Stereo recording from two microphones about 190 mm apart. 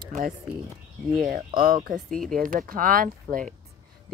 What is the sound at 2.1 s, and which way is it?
Speech, centre (ahead or behind).